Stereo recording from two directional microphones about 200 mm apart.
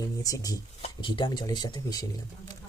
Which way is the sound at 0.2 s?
15° left (ahead or behind).